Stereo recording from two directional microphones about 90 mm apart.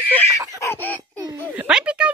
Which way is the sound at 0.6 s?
25° left (ahead or behind).